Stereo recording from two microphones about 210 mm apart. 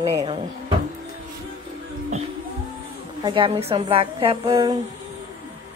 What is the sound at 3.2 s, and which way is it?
A woman's voice, 25° right (ahead or behind).